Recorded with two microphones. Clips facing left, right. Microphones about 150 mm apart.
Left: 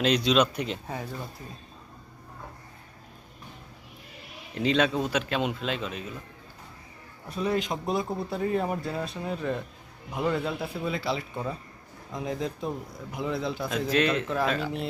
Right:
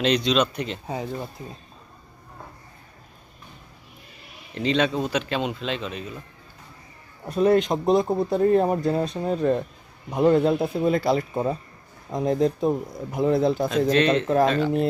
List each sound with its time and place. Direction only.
0.0 s speech: 5° left (ahead or behind)
4.5 s speech: 5° left (ahead or behind)
7.3 s a man's voice: 45° right (ahead or behind)
13.7 s speech: 5° left (ahead or behind)